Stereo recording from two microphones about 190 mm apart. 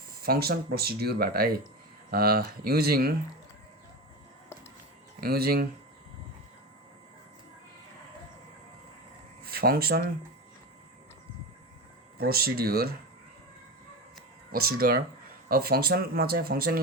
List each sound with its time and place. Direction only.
0.2 s speech: 55° right (ahead or behind)
5.2 s speech: 55° right (ahead or behind)
9.4 s speech: 55° right (ahead or behind)
12.1 s speech: 55° right (ahead or behind)
14.5 s speech: 50° right (ahead or behind)